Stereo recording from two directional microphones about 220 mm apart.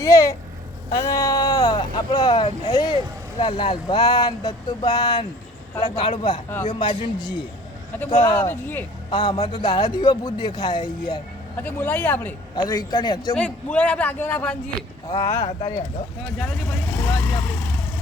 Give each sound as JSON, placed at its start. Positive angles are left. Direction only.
{"t": 0.0, "sound": "speech", "side_deg": 15}
{"t": 8.4, "sound": "a man's voice", "side_deg": 10}
{"t": 9.0, "sound": "speech", "side_deg": 20}
{"t": 11.6, "sound": "a man's voice", "side_deg": 10}
{"t": 13.3, "sound": "a man's voice", "side_deg": 5}